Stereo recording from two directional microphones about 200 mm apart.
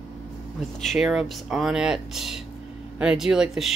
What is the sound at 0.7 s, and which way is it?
Speech, centre (ahead or behind).